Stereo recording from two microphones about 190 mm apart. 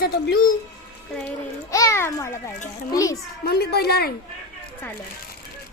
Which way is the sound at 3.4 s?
55° left (ahead or behind).